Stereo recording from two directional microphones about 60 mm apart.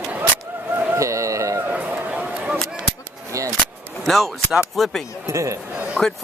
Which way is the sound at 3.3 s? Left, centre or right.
Right.